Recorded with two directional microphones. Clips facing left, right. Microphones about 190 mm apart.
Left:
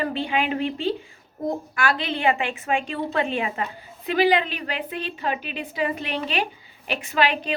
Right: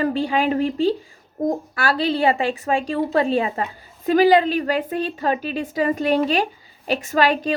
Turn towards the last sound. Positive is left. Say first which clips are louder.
# right 4 dB
turn(degrees=-40)  # may be behind; listen again after turning